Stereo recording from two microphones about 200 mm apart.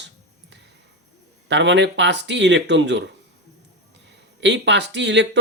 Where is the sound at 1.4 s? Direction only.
65° right (ahead or behind).